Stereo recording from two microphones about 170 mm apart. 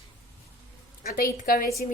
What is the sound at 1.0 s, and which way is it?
Speech, 60° left (ahead or behind).